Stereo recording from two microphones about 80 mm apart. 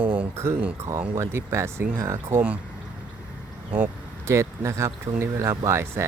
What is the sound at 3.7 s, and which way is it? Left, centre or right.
Speech, right.